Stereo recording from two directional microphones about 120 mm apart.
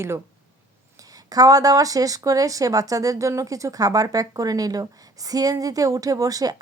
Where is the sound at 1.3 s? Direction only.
30° right (ahead or behind).